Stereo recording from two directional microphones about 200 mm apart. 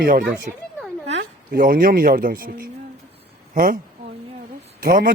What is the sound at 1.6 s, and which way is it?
Speech, 45° right (ahead or behind).